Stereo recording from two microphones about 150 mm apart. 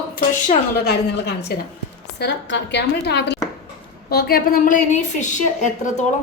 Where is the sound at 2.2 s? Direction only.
90° left.